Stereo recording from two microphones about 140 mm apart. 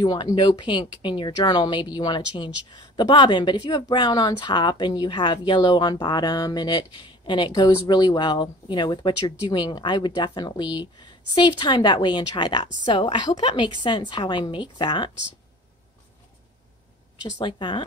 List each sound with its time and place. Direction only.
0.0 s speech: 30° left (ahead or behind)
17.4 s speech: 35° left (ahead or behind)